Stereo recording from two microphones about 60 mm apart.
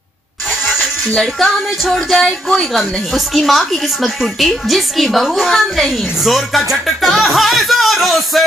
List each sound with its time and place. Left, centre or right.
0.7 s speech: centre